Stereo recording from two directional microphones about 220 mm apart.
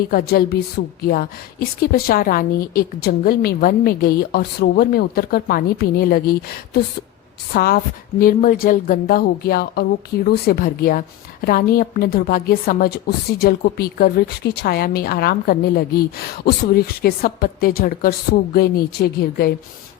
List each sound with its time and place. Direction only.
0.1 s a woman's voice: 45° left (ahead or behind)
7.5 s a woman's voice: 45° left (ahead or behind)